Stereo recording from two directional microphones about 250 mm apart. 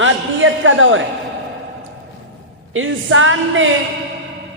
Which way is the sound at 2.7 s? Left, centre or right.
Right.